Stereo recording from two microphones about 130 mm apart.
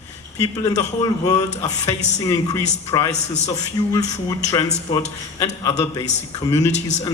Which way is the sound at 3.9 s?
25° left (ahead or behind).